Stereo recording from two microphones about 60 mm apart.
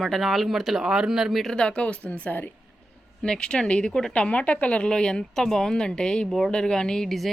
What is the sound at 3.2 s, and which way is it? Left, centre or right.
Speech, centre.